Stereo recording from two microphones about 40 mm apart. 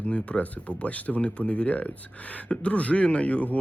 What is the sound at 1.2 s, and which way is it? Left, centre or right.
Speech, left.